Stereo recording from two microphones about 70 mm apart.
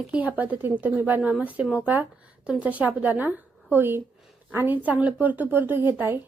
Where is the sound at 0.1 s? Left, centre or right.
Right.